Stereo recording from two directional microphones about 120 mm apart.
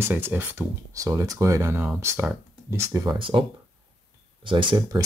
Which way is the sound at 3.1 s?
45° right (ahead or behind).